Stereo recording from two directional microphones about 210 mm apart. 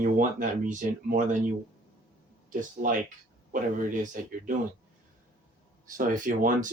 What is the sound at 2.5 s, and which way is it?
Speech, 40° right (ahead or behind).